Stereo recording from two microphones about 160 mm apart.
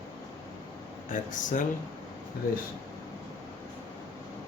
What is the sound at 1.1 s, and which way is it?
Speech, 55° left (ahead or behind).